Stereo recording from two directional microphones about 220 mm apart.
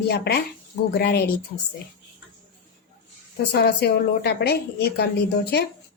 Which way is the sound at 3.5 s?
45° left (ahead or behind).